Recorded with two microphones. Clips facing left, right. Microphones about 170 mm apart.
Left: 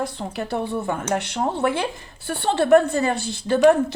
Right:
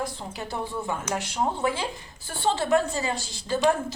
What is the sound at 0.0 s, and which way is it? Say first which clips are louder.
A woman's voice: left 5 dB; 65° left (ahead or behind).